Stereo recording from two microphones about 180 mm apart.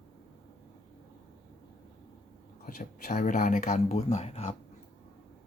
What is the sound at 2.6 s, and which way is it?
Speech, 50° left (ahead or behind).